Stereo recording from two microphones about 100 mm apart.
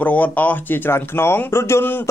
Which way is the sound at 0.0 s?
15° left (ahead or behind).